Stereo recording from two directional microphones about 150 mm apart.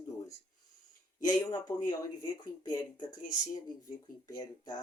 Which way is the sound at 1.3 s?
25° left (ahead or behind).